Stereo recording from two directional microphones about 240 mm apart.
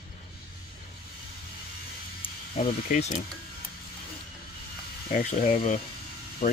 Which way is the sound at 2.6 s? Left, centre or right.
Left.